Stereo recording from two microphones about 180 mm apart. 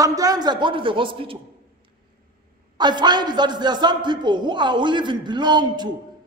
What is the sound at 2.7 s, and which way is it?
A man's voice, 25° right (ahead or behind).